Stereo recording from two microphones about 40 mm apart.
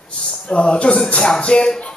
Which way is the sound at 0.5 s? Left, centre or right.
Left.